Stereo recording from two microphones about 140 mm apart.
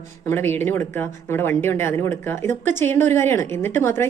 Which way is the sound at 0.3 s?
15° left (ahead or behind).